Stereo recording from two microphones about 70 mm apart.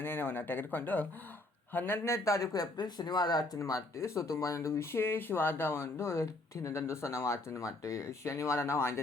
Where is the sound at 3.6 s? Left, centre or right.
Left.